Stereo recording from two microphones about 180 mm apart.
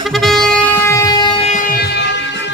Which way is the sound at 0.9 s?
15° left (ahead or behind).